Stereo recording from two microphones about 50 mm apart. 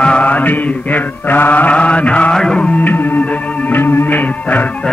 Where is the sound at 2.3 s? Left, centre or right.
Centre.